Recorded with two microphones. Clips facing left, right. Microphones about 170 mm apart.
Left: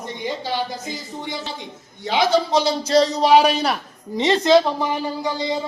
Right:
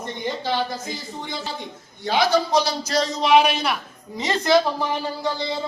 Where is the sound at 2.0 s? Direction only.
20° left (ahead or behind); by 3.7 s 40° left (ahead or behind).